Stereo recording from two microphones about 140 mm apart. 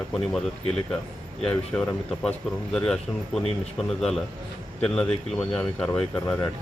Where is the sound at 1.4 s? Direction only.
5° left (ahead or behind).